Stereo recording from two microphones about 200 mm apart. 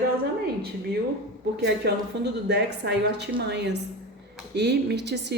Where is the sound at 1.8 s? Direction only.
55° right (ahead or behind).